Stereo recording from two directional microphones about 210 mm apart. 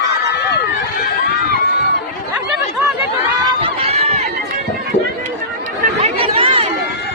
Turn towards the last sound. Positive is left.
turn(degrees=-25)  # may be behind; listen again after turning